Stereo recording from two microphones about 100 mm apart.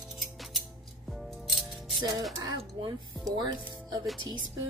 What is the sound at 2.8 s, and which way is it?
Speech, 55° right (ahead or behind).